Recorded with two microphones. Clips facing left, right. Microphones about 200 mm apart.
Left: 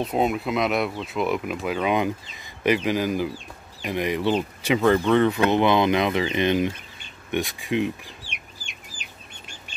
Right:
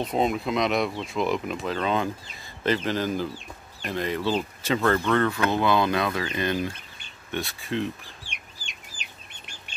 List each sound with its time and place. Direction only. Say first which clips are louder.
0.0 s speech: left 2 dB; 5° left (ahead or behind)